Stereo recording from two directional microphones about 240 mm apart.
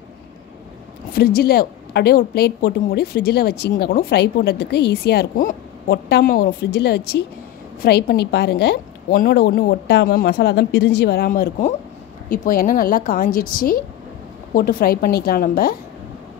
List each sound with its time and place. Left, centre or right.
1.1 s a woman's voice: left